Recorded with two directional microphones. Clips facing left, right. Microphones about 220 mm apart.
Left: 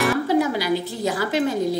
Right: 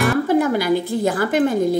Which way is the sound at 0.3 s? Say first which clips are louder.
Right 3 dB; 50° right (ahead or behind).